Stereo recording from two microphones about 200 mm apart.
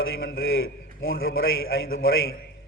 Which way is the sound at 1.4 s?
50° left (ahead or behind).